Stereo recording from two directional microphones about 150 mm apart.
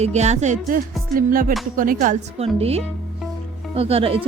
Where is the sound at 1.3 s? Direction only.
70° right (ahead or behind).